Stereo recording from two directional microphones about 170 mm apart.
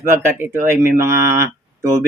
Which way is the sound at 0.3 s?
15° right (ahead or behind).